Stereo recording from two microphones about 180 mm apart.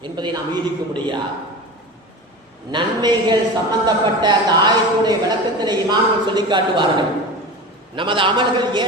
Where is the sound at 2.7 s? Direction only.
25° right (ahead or behind).